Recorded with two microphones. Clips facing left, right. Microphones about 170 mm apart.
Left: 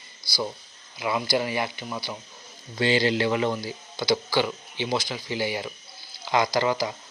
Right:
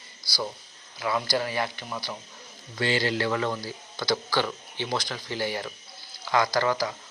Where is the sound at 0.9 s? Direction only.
10° left (ahead or behind).